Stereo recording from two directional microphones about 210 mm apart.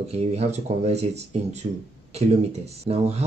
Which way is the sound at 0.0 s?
30° right (ahead or behind).